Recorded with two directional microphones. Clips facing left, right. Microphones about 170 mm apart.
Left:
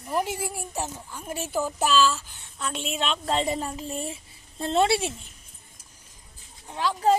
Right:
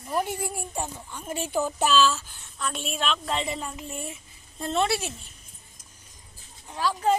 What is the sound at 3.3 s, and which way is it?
A woman's voice, 40° left (ahead or behind).